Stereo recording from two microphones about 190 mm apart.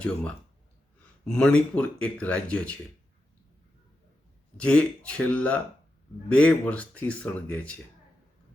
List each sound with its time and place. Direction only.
1.2 s speech: 5° left (ahead or behind)
4.5 s speech: 5° left (ahead or behind)